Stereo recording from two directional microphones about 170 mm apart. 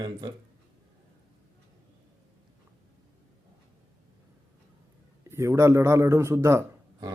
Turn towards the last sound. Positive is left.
turn(degrees=-20)  # may be behind; listen again after turning